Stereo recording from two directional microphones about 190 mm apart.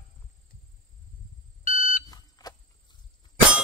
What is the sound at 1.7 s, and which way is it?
Smoke detector, 45° left (ahead or behind).